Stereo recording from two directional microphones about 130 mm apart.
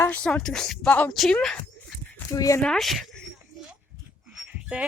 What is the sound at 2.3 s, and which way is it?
Speech, 25° left (ahead or behind).